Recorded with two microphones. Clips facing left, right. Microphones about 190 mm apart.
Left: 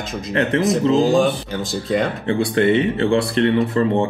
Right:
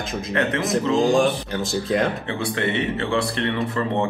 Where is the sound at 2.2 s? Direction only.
35° left (ahead or behind).